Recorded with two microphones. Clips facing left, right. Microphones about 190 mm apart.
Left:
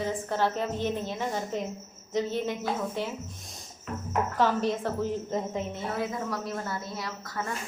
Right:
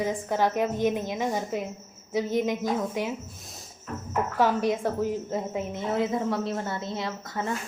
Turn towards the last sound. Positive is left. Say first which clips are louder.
# right 4 dB
turn(degrees=-25)  # may be behind; listen again after turning